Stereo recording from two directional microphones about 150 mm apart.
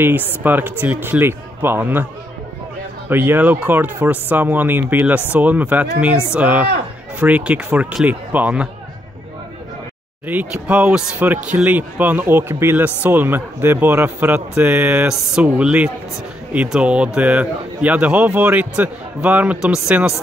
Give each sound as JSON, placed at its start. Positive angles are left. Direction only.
{"t": 0.0, "sound": "a man's voice", "side_deg": -15}
{"t": 3.1, "sound": "a man's voice", "side_deg": -15}
{"t": 10.2, "sound": "a man's voice", "side_deg": -10}